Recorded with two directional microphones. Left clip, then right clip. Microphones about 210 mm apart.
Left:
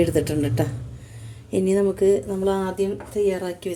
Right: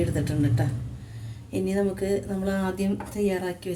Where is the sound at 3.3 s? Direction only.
35° left (ahead or behind).